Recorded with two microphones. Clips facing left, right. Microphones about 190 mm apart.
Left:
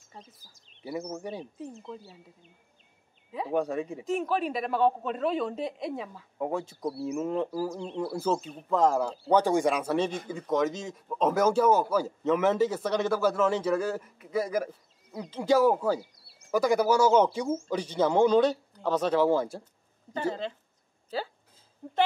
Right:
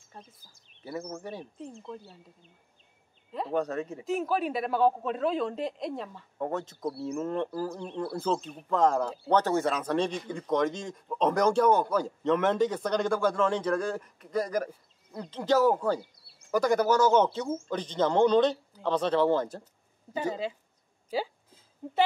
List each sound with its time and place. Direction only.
0.8 s speech: 15° left (ahead or behind)
1.6 s speech: 5° left (ahead or behind)
3.3 s speech: 5° left (ahead or behind)
4.0 s speech: centre (ahead or behind)
20.1 s speech: 10° right (ahead or behind)